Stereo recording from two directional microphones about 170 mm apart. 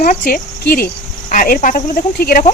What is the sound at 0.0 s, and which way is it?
Insect, 55° left (ahead or behind).